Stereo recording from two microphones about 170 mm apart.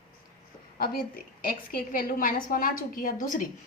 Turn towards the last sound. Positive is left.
turn(degrees=50)  # may be behind; listen again after turning